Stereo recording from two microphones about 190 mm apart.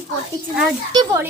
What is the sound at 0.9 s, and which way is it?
Speech, 15° right (ahead or behind).